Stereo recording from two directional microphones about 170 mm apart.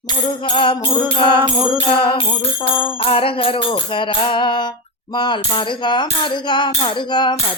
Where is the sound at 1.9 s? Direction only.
30° left (ahead or behind).